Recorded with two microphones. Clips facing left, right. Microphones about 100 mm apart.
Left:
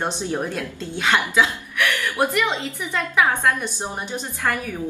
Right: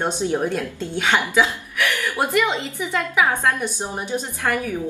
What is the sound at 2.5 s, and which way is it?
A woman's voice, 15° right (ahead or behind).